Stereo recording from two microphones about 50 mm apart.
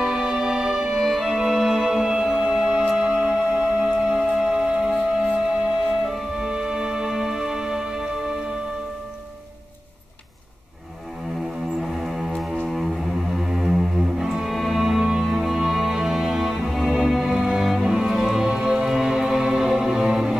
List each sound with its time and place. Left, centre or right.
0.0 s music: centre
11.9 s music: centre